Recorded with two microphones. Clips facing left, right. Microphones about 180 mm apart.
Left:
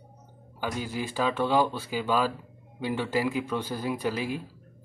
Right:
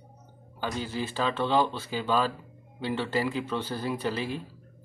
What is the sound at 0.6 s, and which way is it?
A man's voice, 10° left (ahead or behind).